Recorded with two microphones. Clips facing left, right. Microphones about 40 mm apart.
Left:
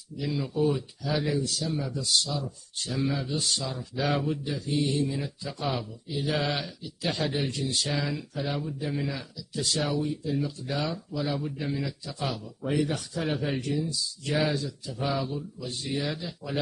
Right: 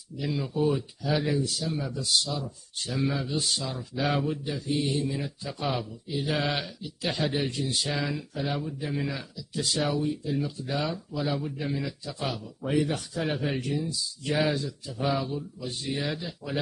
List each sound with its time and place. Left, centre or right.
0.2 s speech: centre
13.7 s speech: centre
15.0 s speech: centre